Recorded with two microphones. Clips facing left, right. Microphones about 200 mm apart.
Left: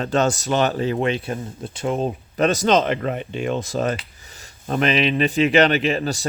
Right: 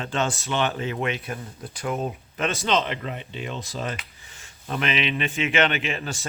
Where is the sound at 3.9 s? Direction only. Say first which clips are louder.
Left 7 dB; 35° left (ahead or behind).